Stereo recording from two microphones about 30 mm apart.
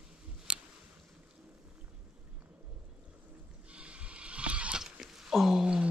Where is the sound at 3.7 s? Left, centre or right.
Right.